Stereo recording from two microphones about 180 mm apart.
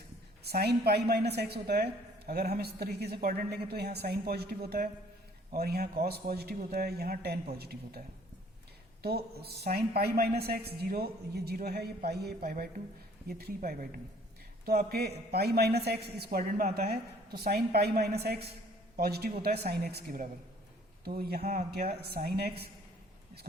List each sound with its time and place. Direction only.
0.4 s a woman's voice: 65° right (ahead or behind)